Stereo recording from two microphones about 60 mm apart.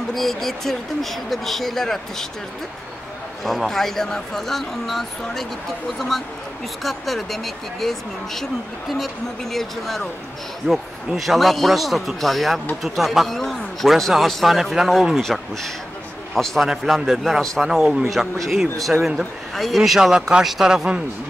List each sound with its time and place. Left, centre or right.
0.1 s speech: centre
3.4 s a man's voice: centre